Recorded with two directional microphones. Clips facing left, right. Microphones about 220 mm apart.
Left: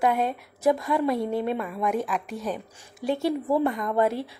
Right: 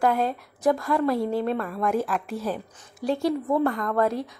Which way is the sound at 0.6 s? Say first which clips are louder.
Even; 20° left (ahead or behind).